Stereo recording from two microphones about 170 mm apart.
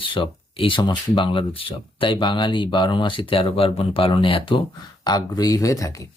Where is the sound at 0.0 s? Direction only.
30° left (ahead or behind).